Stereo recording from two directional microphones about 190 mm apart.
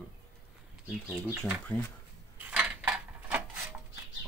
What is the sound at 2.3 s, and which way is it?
Dishes, 5° right (ahead or behind).